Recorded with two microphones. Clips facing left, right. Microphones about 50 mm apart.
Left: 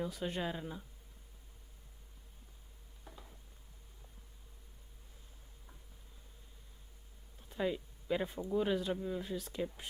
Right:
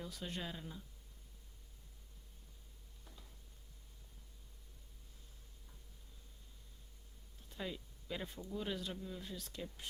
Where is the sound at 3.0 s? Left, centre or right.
Left.